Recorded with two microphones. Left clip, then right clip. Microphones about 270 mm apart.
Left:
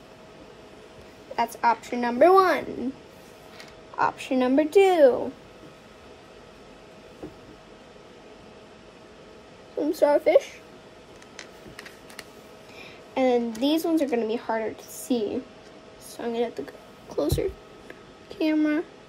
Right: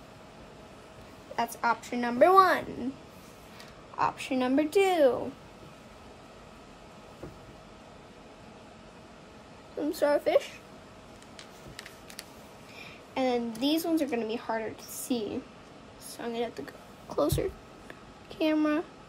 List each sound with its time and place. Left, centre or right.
1.6 s a woman's voice: centre
3.9 s a woman's voice: centre
9.8 s a woman's voice: centre
12.7 s a sound: centre
13.6 s a woman's voice: centre
17.1 s a sound: right